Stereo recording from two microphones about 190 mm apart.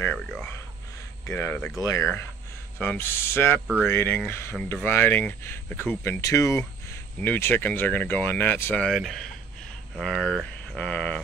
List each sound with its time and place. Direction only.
0.0 s speech: 5° left (ahead or behind)